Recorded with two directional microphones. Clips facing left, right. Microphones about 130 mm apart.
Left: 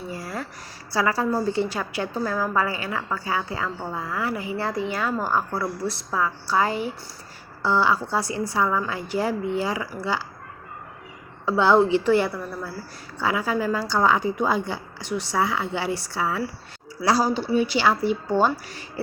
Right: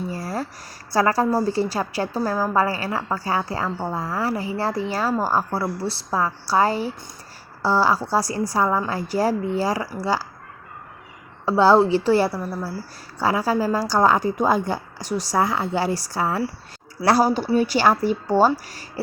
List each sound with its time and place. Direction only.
0.1 s a sound: 35° right (ahead or behind)
0.9 s a woman's voice: 45° right (ahead or behind)
11.4 s a woman's voice: 35° right (ahead or behind)